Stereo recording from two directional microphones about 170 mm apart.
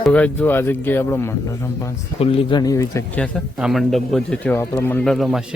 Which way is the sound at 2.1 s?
35° left (ahead or behind).